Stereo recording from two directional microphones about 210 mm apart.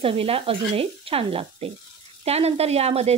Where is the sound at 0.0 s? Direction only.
25° right (ahead or behind).